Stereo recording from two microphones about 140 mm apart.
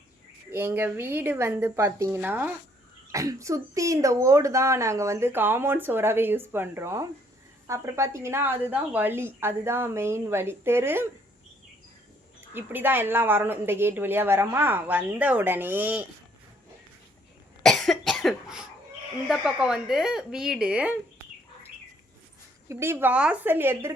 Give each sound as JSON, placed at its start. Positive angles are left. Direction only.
{"t": 0.5, "sound": "a woman's voice", "side_deg": -15}
{"t": 12.5, "sound": "a woman's voice", "side_deg": -15}
{"t": 17.6, "sound": "cough", "side_deg": 5}
{"t": 19.3, "sound": "speech", "side_deg": -5}
{"t": 22.7, "sound": "a woman's voice", "side_deg": -20}